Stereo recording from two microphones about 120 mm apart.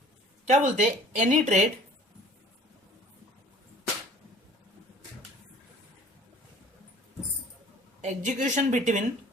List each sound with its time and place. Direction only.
0.4 s speech: 80° right
8.0 s speech: 85° right